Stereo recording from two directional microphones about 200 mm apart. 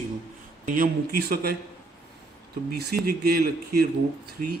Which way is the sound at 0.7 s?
45° right (ahead or behind).